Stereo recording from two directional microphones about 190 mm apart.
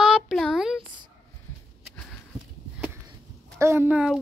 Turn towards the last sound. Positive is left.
turn(degrees=-5)  # may be behind; listen again after turning